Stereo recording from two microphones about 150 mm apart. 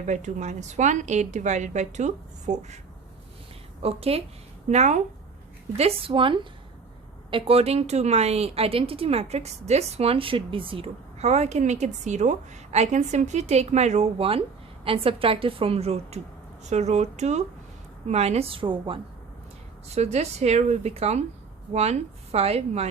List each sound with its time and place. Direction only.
0.0 s speech: 55° right (ahead or behind)
3.8 s a woman's voice: 40° right (ahead or behind)
4.7 s speech: 50° right (ahead or behind)
5.7 s a woman's voice: 40° right (ahead or behind)
19.9 s speech: 45° right (ahead or behind)